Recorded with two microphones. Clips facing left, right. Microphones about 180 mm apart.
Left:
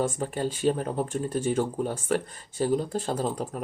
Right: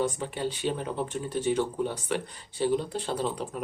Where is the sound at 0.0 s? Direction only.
45° left (ahead or behind).